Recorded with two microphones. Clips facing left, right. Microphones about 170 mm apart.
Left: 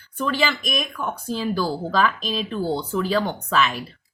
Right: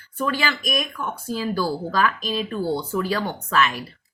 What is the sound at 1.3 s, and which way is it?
Speech, 15° left (ahead or behind).